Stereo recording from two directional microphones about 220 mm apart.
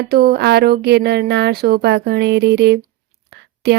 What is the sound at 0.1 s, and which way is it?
Speech, 45° right (ahead or behind).